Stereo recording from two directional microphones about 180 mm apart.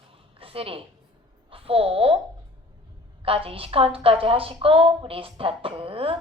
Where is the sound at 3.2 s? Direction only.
30° right (ahead or behind).